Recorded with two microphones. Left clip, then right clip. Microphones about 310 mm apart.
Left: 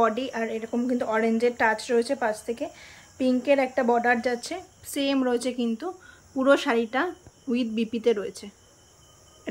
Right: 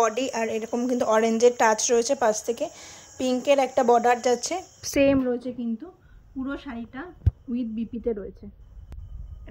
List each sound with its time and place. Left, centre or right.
0.0 s speech: right
5.0 s a woman's voice: centre